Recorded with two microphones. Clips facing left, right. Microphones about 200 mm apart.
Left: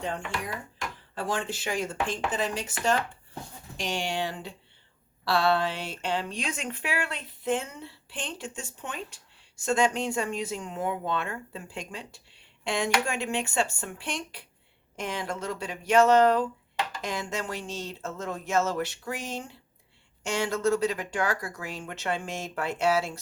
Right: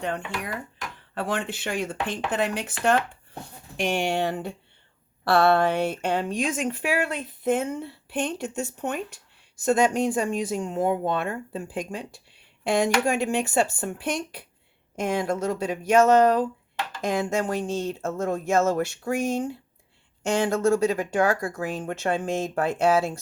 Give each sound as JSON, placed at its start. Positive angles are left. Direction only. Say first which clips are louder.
{"t": 1.1, "sound": "a woman's voice", "louder": "right 3 dB", "side_deg": -60}
{"t": 9.6, "sound": "a woman's voice", "louder": "right 5 dB", "side_deg": -40}